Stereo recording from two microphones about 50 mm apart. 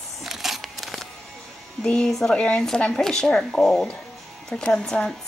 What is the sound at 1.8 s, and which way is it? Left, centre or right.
Speech, centre.